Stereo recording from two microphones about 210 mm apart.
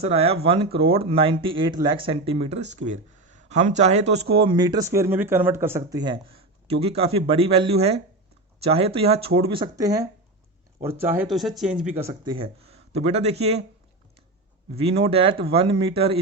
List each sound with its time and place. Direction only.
0.0 s speech: 30° right (ahead or behind); by 12.1 s 10° right (ahead or behind)
12.2 s speech: 25° right (ahead or behind)
14.8 s speech: 25° right (ahead or behind)